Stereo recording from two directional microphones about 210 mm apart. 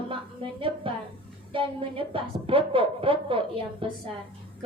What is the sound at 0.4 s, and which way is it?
A woman's voice, 25° right (ahead or behind).